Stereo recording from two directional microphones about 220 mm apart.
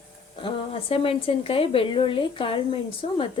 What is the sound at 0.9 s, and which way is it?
A woman's voice, 25° left (ahead or behind).